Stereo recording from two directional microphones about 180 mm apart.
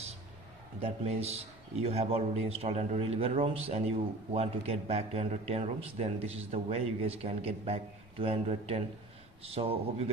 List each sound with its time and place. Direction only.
0.7 s a man's voice: 35° right (ahead or behind)